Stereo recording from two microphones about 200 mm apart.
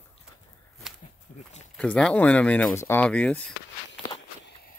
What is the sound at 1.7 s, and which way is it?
Speech, 5° left (ahead or behind).